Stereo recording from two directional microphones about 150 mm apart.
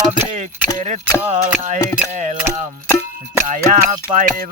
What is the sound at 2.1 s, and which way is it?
Music, 55° right (ahead or behind).